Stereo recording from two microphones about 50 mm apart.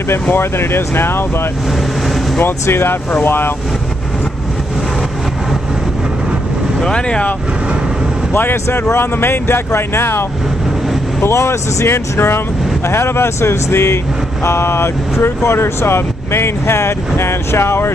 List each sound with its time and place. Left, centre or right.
0.1 s speech: left
2.7 s speech: left
6.8 s speech: centre
8.3 s speech: left